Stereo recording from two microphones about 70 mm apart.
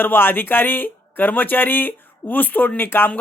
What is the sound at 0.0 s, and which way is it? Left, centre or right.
Speech, left.